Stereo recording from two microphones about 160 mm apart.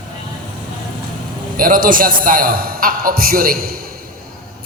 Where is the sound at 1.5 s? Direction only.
60° right (ahead or behind).